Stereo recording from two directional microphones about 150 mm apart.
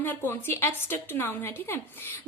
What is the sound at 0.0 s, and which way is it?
A woman's voice, 15° left (ahead or behind).